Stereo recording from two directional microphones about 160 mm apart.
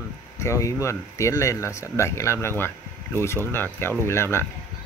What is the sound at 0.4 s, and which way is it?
Speech, 20° left (ahead or behind).